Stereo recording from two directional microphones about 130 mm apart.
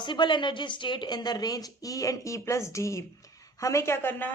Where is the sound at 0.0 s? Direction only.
35° left (ahead or behind).